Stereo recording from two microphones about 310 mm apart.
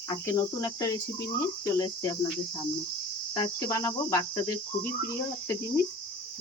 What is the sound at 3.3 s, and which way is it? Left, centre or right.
Cricket, centre.